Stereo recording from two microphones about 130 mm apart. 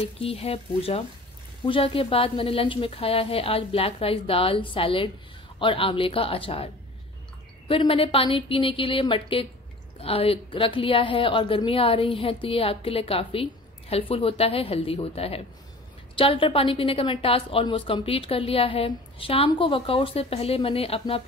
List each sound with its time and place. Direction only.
0.2 s a woman's voice: 50° left (ahead or behind)